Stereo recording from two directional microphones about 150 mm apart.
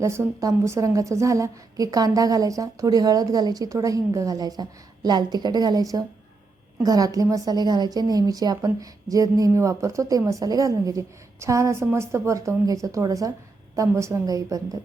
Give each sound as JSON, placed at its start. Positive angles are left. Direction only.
{"t": 0.0, "sound": "a woman's voice", "side_deg": -20}